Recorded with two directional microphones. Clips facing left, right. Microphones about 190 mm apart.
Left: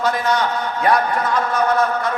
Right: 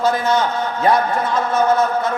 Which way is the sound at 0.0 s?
25° right (ahead or behind).